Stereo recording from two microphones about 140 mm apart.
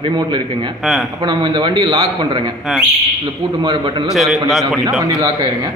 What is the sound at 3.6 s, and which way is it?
Speech, 35° right (ahead or behind).